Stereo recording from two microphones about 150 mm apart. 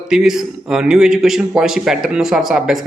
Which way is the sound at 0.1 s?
5° right (ahead or behind).